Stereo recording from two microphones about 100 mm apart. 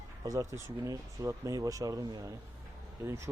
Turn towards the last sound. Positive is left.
turn(degrees=-30)  # may be behind; listen again after turning